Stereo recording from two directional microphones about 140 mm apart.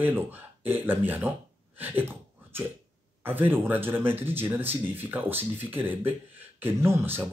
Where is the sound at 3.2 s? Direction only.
15° right (ahead or behind).